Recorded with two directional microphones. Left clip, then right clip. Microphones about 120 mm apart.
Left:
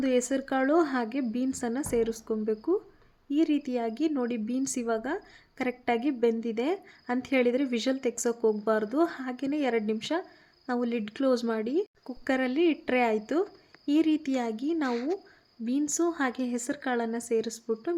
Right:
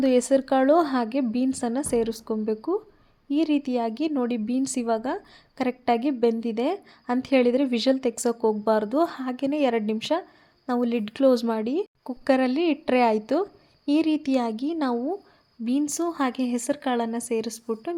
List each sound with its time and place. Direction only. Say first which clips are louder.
0.0 s speech: right 7 dB; 25° right (ahead or behind)